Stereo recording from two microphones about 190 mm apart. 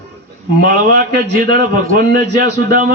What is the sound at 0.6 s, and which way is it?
Speech, 60° right (ahead or behind).